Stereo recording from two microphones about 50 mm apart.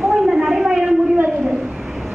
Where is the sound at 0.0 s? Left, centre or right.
Centre.